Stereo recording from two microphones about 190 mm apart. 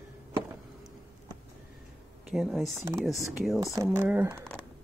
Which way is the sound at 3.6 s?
15° right (ahead or behind).